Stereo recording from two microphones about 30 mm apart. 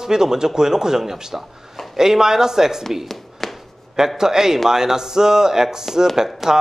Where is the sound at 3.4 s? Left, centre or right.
Centre.